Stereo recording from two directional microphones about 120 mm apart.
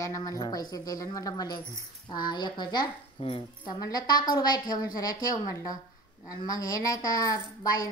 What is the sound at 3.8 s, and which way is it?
A woman's voice, 35° left (ahead or behind).